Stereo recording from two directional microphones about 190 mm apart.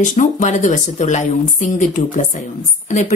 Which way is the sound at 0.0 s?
40° left (ahead or behind).